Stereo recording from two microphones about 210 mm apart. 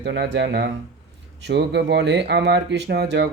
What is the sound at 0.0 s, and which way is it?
Speech, 55° right (ahead or behind).